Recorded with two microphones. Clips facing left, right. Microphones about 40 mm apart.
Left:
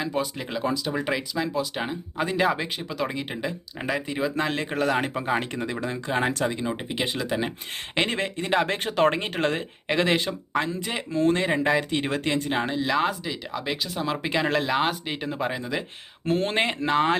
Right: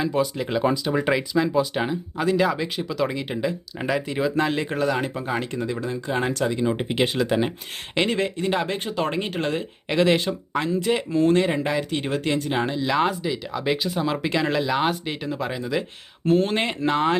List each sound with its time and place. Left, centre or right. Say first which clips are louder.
0.0 s speech: right 5 dB; centre
0.7 s speech: right 4 dB; centre
1.9 s speech: right 5 dB; centre
2.7 s speech: right 4 dB; centre
4.8 s speech: even; left
6.1 s speech: right 1 dB; centre
6.7 s speech: right 5 dB; centre
7.0 s speech: right 5 dB; centre
8.1 s speech: right 1 dB; left
9.9 s speech: right 3 dB; centre
11.6 s speech: left 1 dB; left
12.5 s speech: right 2 dB; centre
14.2 s speech: right 1 dB; centre